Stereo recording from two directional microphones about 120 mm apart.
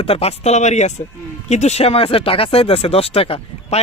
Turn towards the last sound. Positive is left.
turn(degrees=50)  # may be behind; listen again after turning